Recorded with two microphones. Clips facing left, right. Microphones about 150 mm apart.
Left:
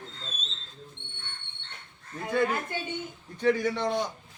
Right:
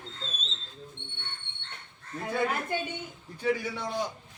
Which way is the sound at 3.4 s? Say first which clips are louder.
Left 4 dB; 5° right (ahead or behind).